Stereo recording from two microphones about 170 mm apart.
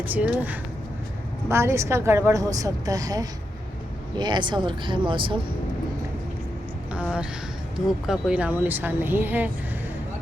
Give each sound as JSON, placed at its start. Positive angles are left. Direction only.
{"t": 0.0, "sound": "a woman's voice", "side_deg": -10}
{"t": 6.9, "sound": "a woman's voice", "side_deg": -5}